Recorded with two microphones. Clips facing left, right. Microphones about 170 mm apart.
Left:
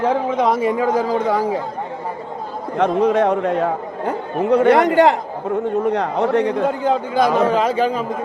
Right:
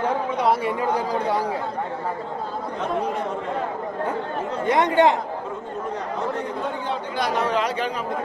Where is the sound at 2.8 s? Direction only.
90° left.